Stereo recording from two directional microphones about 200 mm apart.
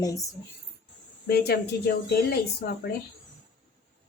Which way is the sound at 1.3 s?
50° left (ahead or behind).